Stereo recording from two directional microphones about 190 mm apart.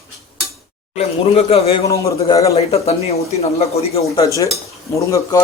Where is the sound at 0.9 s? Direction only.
30° left (ahead or behind).